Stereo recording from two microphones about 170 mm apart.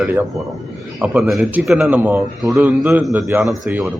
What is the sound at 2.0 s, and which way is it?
Speech, 10° right (ahead or behind).